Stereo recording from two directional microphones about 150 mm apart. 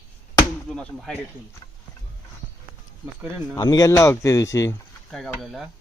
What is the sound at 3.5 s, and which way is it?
Speech, 25° left (ahead or behind).